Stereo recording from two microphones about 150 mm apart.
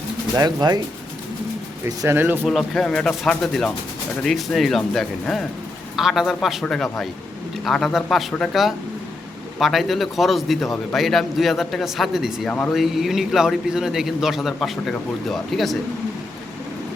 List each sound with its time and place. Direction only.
0.3 s speech: 25° right (ahead or behind)
1.8 s speech: 20° right (ahead or behind)
2.4 s a man's voice: centre (ahead or behind)
12.5 s speech: 10° left (ahead or behind)
12.7 s a man's voice: centre (ahead or behind)